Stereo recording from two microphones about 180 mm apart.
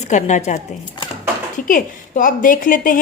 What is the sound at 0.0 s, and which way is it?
Speech, 40° left (ahead or behind).